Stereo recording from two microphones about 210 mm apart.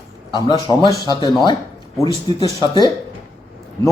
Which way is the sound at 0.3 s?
20° left (ahead or behind).